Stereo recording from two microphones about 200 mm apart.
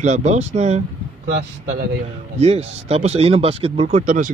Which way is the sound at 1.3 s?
60° right (ahead or behind).